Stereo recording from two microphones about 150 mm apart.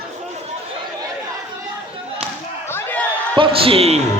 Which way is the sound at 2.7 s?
15° left (ahead or behind).